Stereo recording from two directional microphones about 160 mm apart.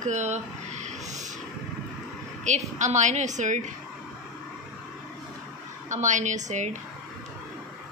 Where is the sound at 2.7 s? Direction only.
50° right (ahead or behind).